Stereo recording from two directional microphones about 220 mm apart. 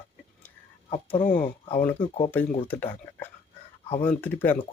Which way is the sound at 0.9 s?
30° left (ahead or behind).